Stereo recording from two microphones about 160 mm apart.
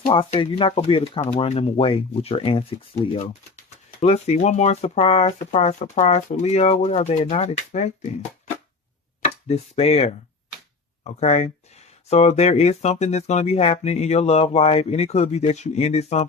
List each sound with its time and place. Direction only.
0.1 s speech: 30° left (ahead or behind)
9.2 s speech: 40° left (ahead or behind)